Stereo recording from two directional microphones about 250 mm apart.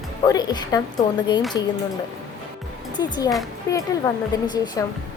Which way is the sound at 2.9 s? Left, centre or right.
Centre.